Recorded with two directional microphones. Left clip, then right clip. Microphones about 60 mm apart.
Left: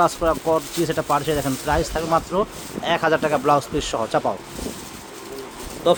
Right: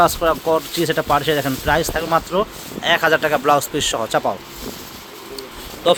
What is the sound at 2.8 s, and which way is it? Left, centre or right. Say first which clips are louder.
Speech: right 4 dB; centre.